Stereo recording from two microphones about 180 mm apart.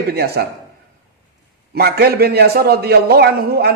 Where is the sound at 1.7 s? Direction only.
60° right (ahead or behind).